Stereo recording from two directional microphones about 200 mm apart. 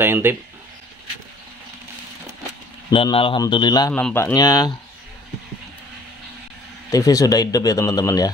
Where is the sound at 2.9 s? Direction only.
25° left (ahead or behind).